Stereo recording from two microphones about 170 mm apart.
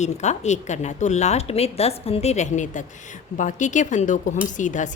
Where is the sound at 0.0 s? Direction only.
40° left (ahead or behind).